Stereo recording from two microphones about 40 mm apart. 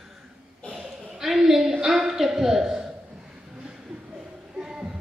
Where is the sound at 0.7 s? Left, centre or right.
Centre.